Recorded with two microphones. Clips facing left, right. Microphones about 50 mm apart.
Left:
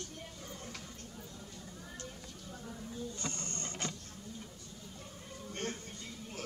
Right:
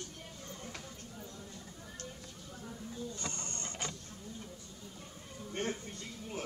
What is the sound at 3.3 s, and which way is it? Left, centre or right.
Printer, right.